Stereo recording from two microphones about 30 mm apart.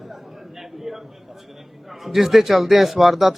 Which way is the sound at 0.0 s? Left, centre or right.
Centre.